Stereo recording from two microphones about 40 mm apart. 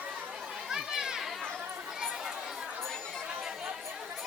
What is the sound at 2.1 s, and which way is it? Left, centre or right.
Chatter, centre.